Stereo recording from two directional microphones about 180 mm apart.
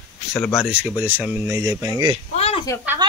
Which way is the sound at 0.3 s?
15° left (ahead or behind).